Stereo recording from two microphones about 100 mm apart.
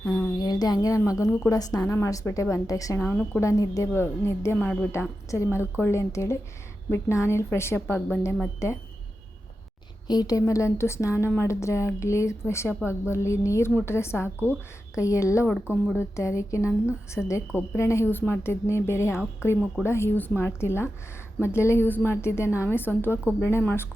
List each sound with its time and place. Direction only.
0.0 s a woman's voice: 35° left (ahead or behind)
3.0 s a woman's voice: 20° left (ahead or behind)
3.4 s a woman's voice: 35° left (ahead or behind)
10.1 s a woman's voice: 40° left (ahead or behind); by 23.8 s 25° left (ahead or behind)